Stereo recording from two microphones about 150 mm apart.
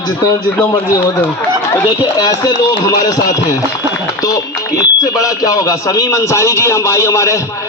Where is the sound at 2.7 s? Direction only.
25° left (ahead or behind).